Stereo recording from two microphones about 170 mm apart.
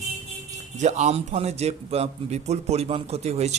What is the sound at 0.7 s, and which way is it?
Speech, 45° right (ahead or behind).